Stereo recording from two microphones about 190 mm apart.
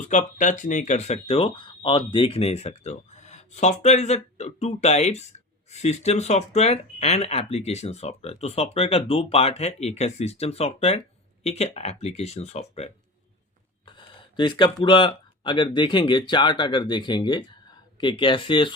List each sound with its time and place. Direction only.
0.1 s speech: 40° left (ahead or behind); by 18.7 s 25° left (ahead or behind)